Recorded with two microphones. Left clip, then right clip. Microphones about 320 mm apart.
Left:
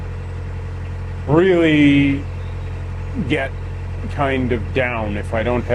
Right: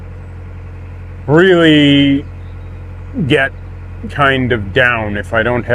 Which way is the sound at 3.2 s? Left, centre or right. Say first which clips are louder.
Right 9 dB; right.